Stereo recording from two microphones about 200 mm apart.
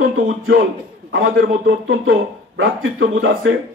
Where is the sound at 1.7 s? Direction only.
85° right.